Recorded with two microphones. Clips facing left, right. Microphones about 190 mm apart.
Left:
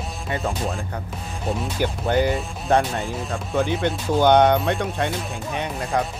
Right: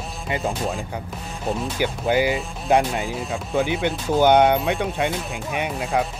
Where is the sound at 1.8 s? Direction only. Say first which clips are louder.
Even; 10° right (ahead or behind).